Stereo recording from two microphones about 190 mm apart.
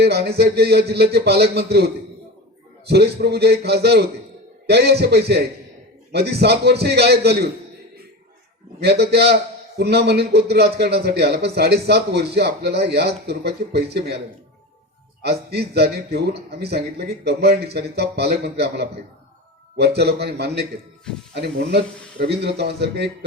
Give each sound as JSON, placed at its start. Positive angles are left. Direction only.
{"t": 0.0, "sound": "a man's voice", "side_deg": -55}
{"t": 8.8, "sound": "a man's voice", "side_deg": -60}
{"t": 15.2, "sound": "a man's voice", "side_deg": -60}